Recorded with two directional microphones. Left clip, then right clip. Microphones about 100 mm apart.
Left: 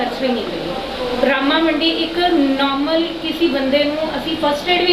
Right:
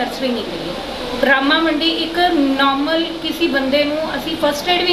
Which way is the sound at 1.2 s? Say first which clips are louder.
Right 2 dB; 15° right (ahead or behind).